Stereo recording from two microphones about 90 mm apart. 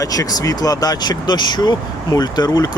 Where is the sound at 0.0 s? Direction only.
40° left (ahead or behind).